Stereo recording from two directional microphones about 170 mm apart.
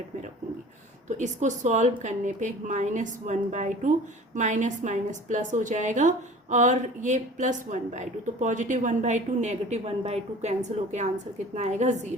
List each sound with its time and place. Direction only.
1.1 s a woman's voice: 45° right (ahead or behind)